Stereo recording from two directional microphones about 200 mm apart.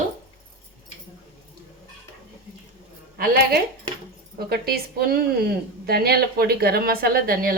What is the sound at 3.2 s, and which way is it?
Speech, 50° right (ahead or behind).